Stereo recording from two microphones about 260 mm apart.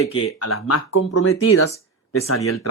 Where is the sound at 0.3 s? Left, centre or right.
Left.